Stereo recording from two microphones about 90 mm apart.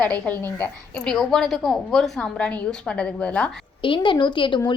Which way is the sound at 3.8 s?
70° left (ahead or behind).